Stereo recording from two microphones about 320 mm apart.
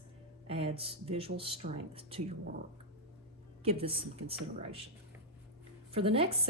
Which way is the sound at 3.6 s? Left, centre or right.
Centre.